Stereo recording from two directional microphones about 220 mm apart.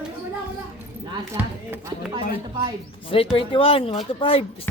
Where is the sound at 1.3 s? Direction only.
10° right (ahead or behind).